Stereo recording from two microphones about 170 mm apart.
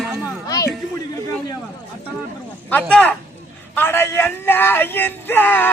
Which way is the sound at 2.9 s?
10° left (ahead or behind).